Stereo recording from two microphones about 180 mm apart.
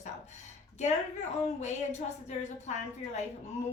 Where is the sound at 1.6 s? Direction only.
40° left (ahead or behind).